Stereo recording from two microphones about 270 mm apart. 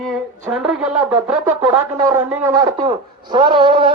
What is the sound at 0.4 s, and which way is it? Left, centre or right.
A man's voice, centre.